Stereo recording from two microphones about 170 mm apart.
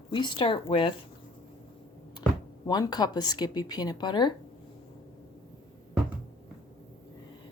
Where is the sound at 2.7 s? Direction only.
25° left (ahead or behind).